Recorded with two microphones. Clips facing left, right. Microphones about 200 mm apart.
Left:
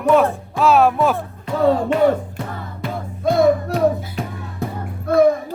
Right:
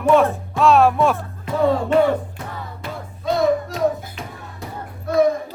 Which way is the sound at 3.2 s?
55° left (ahead or behind).